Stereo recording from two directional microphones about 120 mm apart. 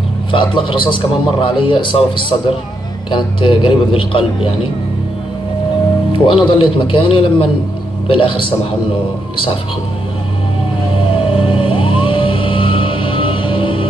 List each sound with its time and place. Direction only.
0.3 s a man's voice: 45° left (ahead or behind)
6.1 s a man's voice: 45° left (ahead or behind)
10.9 s music: 45° left (ahead or behind)